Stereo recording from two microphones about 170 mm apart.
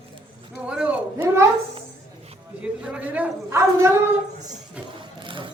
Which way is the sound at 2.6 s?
5° right (ahead or behind).